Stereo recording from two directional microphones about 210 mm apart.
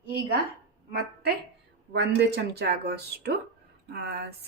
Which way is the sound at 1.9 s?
50° right (ahead or behind).